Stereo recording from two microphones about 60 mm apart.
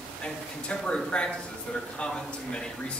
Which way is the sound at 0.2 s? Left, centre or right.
Centre.